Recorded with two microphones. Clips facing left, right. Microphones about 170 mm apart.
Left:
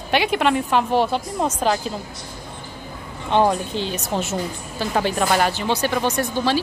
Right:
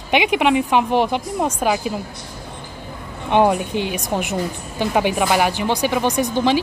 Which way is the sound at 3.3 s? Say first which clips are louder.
Right 2 dB; 15° right (ahead or behind).